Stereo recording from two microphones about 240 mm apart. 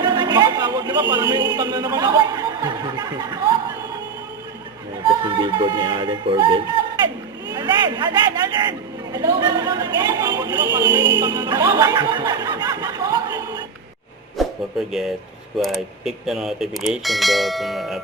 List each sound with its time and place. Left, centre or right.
0.0 s a sound: centre
1.5 s a man's voice: centre
5.0 s speech: centre
7.4 s a sound: centre
9.1 s a man's voice: centre
14.3 s speech: centre